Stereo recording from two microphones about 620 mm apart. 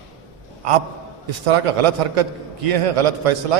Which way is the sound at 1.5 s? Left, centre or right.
Right.